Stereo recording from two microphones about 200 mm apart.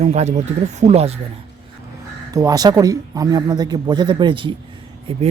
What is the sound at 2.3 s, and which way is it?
Speech, 20° right (ahead or behind).